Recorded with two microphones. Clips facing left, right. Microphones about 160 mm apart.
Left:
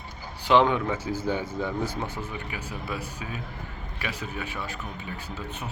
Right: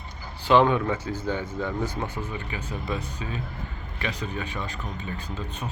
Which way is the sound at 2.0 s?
15° right (ahead or behind).